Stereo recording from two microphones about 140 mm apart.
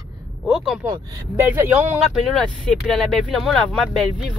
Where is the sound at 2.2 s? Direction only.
Centre (ahead or behind).